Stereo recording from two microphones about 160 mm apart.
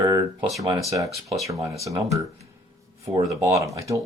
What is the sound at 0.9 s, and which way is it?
Speech, 20° right (ahead or behind).